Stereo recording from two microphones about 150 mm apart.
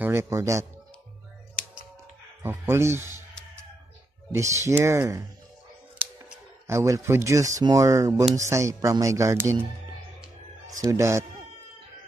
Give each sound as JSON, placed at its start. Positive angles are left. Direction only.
{"t": 0.0, "sound": "speech", "side_deg": -20}
{"t": 2.4, "sound": "speech", "side_deg": -15}
{"t": 4.3, "sound": "speech", "side_deg": -20}
{"t": 6.7, "sound": "speech", "side_deg": -20}
{"t": 10.8, "sound": "speech", "side_deg": -20}